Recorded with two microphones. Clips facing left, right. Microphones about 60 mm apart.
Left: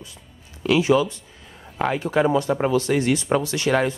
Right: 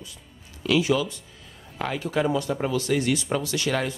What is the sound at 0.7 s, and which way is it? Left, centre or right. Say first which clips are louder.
Speech: left 4 dB; left.